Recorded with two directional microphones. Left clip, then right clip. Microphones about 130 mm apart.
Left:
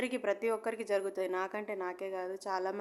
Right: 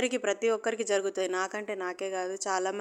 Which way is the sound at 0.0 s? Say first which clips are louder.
Right 5 dB; 25° right (ahead or behind).